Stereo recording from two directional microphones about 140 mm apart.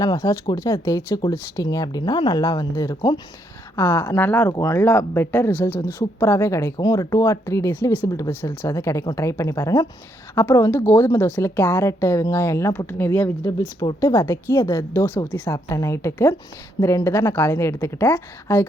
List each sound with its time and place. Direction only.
0.0 s speech: 25° left (ahead or behind)